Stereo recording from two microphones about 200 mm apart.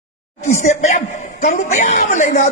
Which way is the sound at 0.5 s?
35° left (ahead or behind).